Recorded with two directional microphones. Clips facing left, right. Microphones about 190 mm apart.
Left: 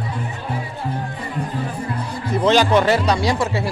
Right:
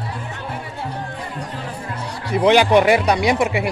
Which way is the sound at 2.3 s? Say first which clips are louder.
Right 2 dB; 15° right (ahead or behind).